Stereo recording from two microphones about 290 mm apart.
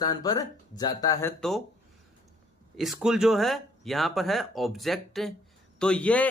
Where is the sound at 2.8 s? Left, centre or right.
Centre.